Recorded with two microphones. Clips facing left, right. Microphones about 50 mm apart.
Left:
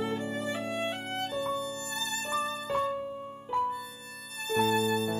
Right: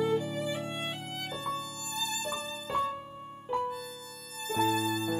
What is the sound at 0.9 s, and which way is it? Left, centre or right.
Violin, left.